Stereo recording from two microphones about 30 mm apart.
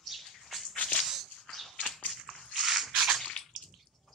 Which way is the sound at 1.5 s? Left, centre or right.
Centre.